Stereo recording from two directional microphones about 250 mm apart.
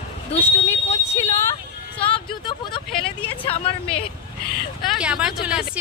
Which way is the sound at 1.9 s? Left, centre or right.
Left.